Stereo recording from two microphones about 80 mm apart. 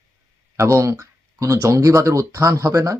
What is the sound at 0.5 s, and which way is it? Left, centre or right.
Speech, right.